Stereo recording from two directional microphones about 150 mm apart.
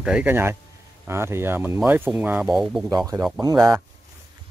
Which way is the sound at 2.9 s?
25° right (ahead or behind).